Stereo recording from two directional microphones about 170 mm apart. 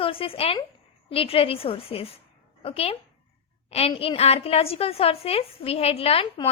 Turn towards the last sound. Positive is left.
turn(degrees=35)  # may be behind; listen again after turning